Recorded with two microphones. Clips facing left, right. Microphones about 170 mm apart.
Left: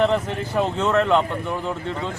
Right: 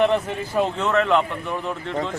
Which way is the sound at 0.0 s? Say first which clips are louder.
Even; centre (ahead or behind).